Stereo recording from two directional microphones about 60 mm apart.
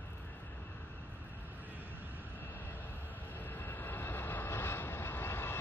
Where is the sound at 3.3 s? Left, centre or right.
Left.